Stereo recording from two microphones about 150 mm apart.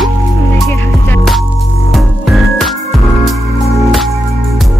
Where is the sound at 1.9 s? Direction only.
Centre (ahead or behind).